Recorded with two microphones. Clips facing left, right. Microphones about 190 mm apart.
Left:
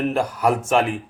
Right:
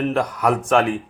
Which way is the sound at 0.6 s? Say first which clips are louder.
Right 2 dB; 25° left (ahead or behind).